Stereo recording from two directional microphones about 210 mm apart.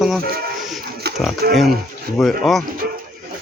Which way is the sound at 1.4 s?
45° right (ahead or behind).